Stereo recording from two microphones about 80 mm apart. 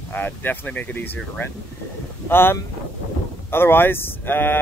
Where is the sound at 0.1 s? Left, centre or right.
Left.